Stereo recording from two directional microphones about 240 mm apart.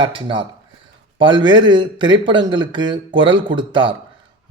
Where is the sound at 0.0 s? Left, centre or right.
Right.